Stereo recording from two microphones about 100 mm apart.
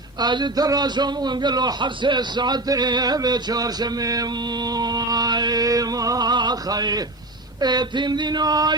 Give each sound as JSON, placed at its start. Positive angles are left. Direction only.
{"t": 0.2, "sound": "a man's voice", "side_deg": -50}